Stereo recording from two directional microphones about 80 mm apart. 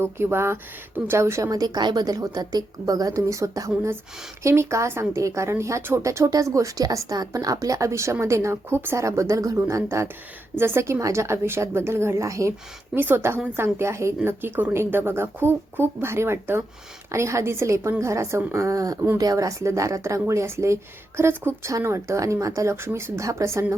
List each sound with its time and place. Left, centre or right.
0.0 s speech: right
1.5 s a woman's voice: right
9.0 s speech: right
12.9 s a woman's voice: right
22.7 s speech: right